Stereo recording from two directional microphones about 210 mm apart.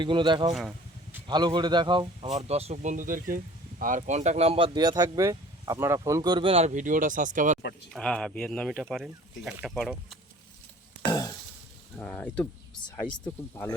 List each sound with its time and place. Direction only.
0.0 s speech: 20° right (ahead or behind)
7.9 s speech: 5° left (ahead or behind)
11.1 s a sound: 20° left (ahead or behind)
11.9 s speech: 10° left (ahead or behind)